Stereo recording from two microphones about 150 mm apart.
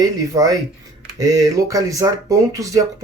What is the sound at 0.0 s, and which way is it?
Speech, 25° right (ahead or behind).